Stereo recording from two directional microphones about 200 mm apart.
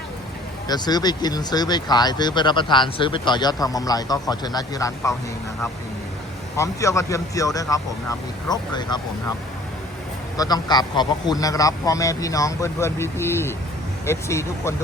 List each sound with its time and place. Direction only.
0.7 s speech: 20° left (ahead or behind)
6.6 s a man's voice: 15° left (ahead or behind)
10.3 s a man's voice: 20° left (ahead or behind)